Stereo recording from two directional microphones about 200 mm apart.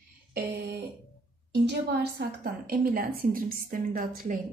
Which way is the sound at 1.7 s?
55° right (ahead or behind).